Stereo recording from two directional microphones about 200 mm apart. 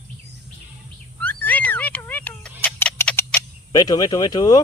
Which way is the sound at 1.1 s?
10° left (ahead or behind).